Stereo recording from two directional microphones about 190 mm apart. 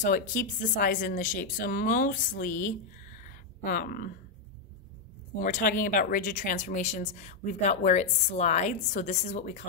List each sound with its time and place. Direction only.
0.0 s speech: 45° left (ahead or behind)
5.4 s speech: 45° left (ahead or behind)